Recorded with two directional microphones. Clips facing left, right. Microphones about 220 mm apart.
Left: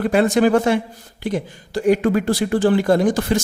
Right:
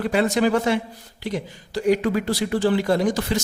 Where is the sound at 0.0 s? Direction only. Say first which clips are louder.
Left 4 dB; 50° left (ahead or behind).